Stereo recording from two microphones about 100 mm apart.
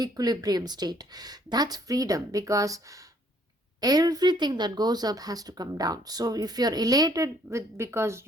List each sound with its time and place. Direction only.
0.0 s speech: 40° right (ahead or behind)